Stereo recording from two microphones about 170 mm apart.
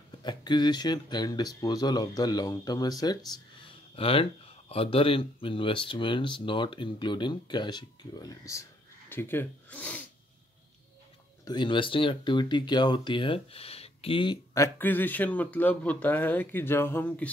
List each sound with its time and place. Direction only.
0.2 s speech: 25° left (ahead or behind); by 10.0 s 10° left (ahead or behind)
11.4 s speech: 25° left (ahead or behind); by 17.3 s 10° left (ahead or behind)